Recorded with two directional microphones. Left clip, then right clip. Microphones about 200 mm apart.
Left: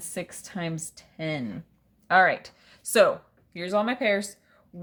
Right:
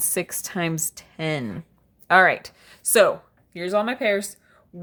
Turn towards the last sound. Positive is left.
turn(degrees=-15)  # may be behind; listen again after turning